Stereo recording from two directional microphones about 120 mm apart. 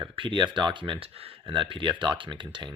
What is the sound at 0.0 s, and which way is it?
Speech, 45° right (ahead or behind).